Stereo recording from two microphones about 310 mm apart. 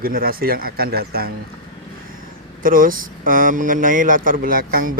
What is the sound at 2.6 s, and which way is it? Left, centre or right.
Speech, right.